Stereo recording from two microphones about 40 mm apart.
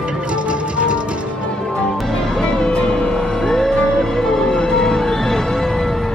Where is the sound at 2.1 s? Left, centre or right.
Centre.